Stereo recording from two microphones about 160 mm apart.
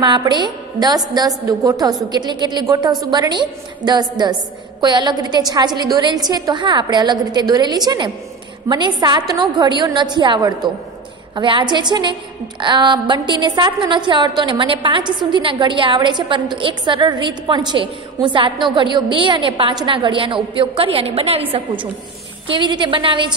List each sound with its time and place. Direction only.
0.0 s a woman's voice: 30° right (ahead or behind)